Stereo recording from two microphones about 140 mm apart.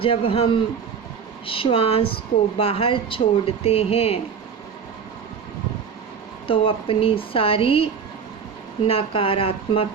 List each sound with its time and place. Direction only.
0.0 s a woman's voice: 40° left (ahead or behind)
6.5 s speech: 40° left (ahead or behind)
8.9 s speech: 40° left (ahead or behind)